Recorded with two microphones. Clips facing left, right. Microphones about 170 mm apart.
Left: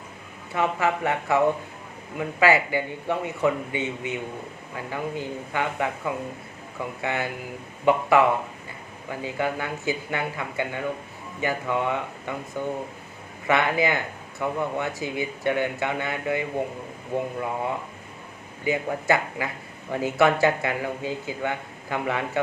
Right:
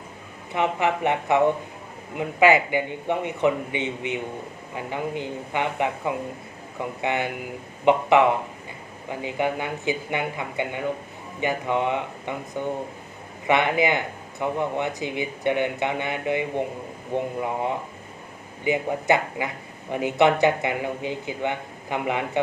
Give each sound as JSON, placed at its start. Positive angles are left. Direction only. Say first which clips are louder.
{"t": 0.5, "sound": "speech", "louder": "right 1 dB", "side_deg": -20}
{"t": 13.5, "sound": "speech", "louder": "right 2 dB", "side_deg": -20}